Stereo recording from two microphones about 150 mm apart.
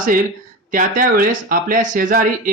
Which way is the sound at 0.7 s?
65° right (ahead or behind).